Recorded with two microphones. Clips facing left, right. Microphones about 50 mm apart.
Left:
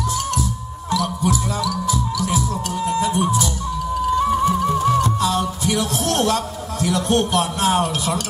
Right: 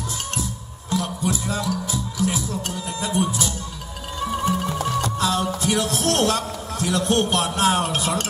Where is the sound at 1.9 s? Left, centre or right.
Right.